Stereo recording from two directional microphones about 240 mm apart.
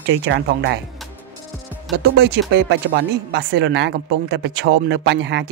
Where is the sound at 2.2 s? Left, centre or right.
Right.